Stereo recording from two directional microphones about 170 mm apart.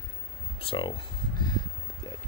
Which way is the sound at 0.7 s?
25° left (ahead or behind).